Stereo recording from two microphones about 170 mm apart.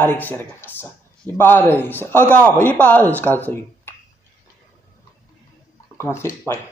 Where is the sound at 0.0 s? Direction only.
10° left (ahead or behind).